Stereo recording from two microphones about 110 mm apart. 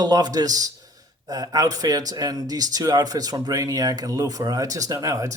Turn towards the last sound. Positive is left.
turn(degrees=-30)  # may be behind; listen again after turning